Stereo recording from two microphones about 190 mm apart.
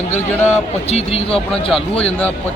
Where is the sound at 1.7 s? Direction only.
5° left (ahead or behind).